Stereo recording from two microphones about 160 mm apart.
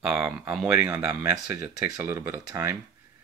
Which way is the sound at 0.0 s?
5° right (ahead or behind).